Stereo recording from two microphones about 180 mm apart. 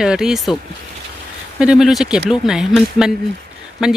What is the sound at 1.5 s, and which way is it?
Speech, 5° right (ahead or behind).